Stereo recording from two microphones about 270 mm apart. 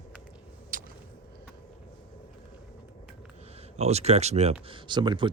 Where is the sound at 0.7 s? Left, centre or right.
Right.